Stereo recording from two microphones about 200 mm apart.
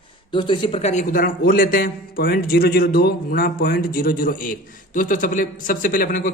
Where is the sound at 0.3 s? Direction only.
25° left (ahead or behind).